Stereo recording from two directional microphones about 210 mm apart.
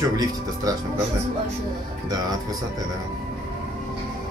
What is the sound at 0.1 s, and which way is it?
Speech, 20° right (ahead or behind).